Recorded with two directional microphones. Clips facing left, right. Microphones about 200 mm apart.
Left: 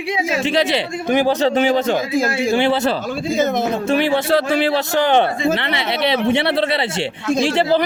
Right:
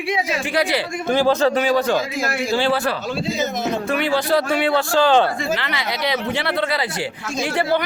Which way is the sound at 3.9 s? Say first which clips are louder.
Left 3 dB; 25° left (ahead or behind).